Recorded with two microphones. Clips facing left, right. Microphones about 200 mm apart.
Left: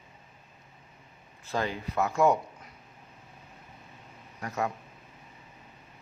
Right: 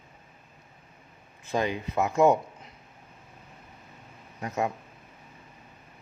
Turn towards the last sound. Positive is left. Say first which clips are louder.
# right 3 dB
turn(degrees=-20)  # may be behind; listen again after turning